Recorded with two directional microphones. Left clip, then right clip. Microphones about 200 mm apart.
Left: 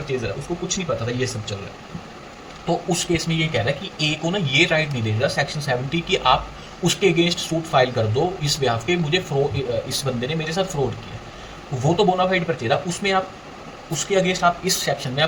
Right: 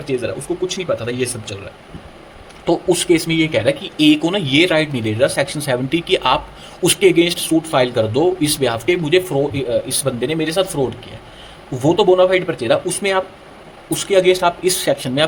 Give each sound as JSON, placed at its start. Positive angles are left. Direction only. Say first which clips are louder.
{"t": 0.7, "sound": "speech", "louder": "right 4 dB", "side_deg": -60}
{"t": 2.6, "sound": "speech", "louder": "right 7 dB", "side_deg": -60}
{"t": 11.9, "sound": "speech", "louder": "right 6 dB", "side_deg": -65}